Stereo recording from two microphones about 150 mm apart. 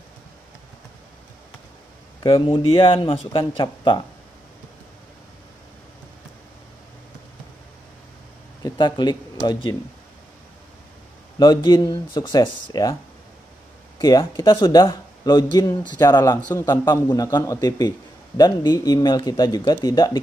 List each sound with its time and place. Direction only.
2.2 s speech: 35° left (ahead or behind)
8.6 s speech: 30° left (ahead or behind)
11.3 s speech: 25° left (ahead or behind)
13.9 s speech: 25° left (ahead or behind)
16.3 s a man's voice: 10° left (ahead or behind)
16.6 s speech: 25° left (ahead or behind)